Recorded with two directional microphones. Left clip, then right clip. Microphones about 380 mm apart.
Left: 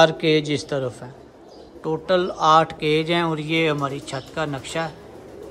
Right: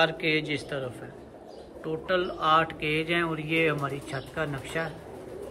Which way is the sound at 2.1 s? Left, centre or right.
Centre.